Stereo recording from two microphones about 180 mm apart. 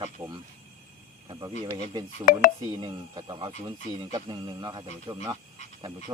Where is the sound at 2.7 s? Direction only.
25° right (ahead or behind).